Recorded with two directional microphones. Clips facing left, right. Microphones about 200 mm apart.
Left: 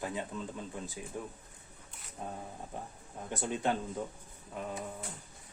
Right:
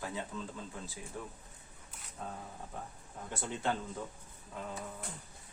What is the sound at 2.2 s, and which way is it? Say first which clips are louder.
A man's voice: left 2 dB; 20° left (ahead or behind).